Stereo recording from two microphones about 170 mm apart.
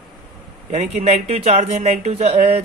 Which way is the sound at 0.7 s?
40° right (ahead or behind).